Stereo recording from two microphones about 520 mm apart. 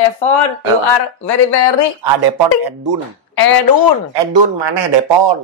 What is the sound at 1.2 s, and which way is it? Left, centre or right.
Speech, left.